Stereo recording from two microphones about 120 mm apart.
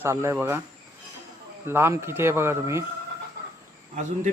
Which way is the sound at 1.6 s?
20° right (ahead or behind).